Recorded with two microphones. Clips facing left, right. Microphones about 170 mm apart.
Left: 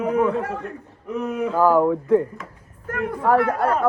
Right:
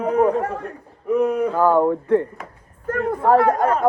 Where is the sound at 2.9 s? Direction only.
35° right (ahead or behind).